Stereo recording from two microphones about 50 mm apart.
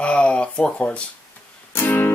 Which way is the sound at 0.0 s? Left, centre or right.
Left.